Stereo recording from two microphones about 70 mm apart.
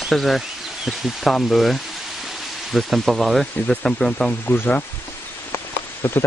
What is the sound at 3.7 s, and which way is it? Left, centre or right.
Speech, centre.